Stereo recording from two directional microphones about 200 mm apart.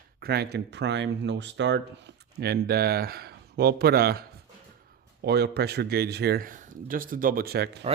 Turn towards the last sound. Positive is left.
turn(degrees=-55)  # may be behind; listen again after turning